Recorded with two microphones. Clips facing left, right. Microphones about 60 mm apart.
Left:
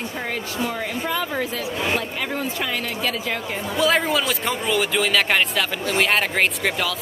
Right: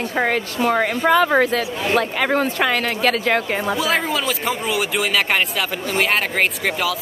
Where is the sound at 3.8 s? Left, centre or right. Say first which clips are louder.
Left 1 dB; centre.